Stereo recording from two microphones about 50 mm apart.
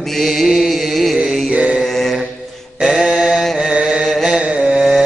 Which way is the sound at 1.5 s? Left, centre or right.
Right.